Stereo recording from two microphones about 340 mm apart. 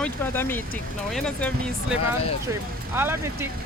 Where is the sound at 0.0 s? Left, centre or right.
Centre.